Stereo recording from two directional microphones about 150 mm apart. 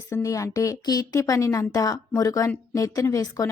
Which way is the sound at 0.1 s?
20° left (ahead or behind).